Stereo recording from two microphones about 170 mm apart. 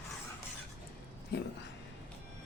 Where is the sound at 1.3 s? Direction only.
80° left.